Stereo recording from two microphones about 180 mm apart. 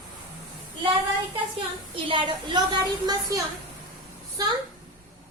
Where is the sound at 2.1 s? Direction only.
25° right (ahead or behind).